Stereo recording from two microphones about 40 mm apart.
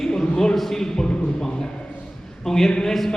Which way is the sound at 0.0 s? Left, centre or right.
Centre.